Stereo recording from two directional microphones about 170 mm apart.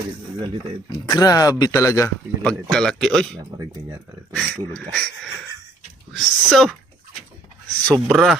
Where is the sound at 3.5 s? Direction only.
25° right (ahead or behind).